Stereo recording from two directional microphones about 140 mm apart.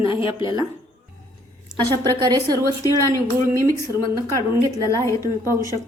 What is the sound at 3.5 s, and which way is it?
Speech, 20° right (ahead or behind).